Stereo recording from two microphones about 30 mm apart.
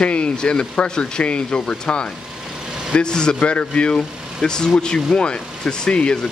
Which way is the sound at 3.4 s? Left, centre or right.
Left.